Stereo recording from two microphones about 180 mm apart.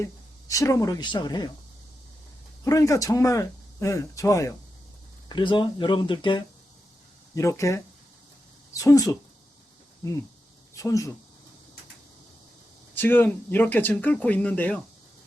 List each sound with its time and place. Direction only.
0.0 s speech: 15° left (ahead or behind)
2.6 s speech: 20° left (ahead or behind)
7.3 s speech: 15° left (ahead or behind)
10.8 s speech: 20° left (ahead or behind)
12.9 s speech: 10° left (ahead or behind)